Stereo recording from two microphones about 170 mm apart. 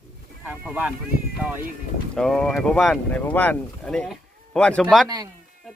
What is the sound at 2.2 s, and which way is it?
Speech, 5° left (ahead or behind).